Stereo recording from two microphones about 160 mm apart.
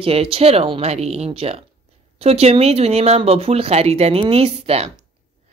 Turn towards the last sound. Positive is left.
turn(degrees=-40)  # may be behind; listen again after turning